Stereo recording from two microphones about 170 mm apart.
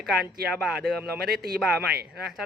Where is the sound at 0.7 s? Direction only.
65° right (ahead or behind).